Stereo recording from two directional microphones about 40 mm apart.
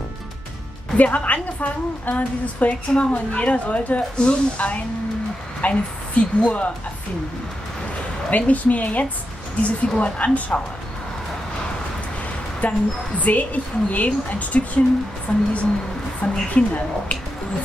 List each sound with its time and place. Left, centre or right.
0.9 s a woman's voice: left
8.3 s a woman's voice: left
12.6 s a woman's voice: left